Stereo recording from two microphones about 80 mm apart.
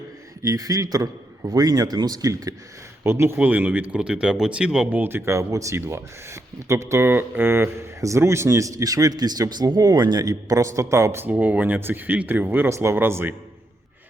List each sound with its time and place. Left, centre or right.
0.4 s a man's voice: right
3.0 s speech: right
3.4 s speech: right
4.9 s speech: right